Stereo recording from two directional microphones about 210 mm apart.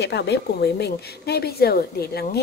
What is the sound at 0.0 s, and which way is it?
A woman's voice, 55° left (ahead or behind).